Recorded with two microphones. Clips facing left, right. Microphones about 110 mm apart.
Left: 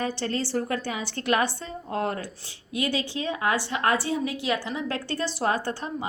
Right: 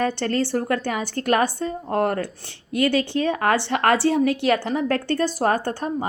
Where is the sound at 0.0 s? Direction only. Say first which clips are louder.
Right 6 dB; 60° right (ahead or behind).